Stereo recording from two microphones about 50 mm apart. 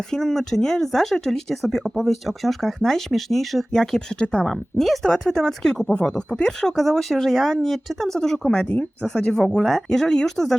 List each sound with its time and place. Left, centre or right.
0.1 s speech: centre
3.7 s speech: centre
4.4 s speech: centre